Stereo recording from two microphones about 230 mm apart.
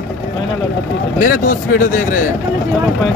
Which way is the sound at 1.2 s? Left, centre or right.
Left.